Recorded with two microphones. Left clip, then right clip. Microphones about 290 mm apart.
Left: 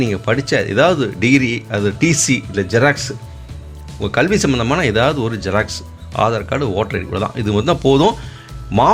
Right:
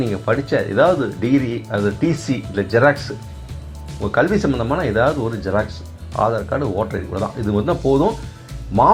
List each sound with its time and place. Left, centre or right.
0.1 s speech: left